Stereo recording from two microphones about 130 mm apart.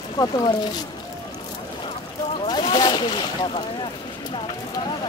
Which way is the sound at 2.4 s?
35° left (ahead or behind).